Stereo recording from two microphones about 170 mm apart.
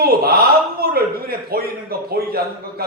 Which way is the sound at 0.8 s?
65° right (ahead or behind).